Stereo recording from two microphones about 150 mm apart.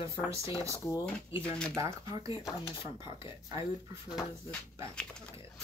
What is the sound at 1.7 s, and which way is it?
Speech, 20° right (ahead or behind).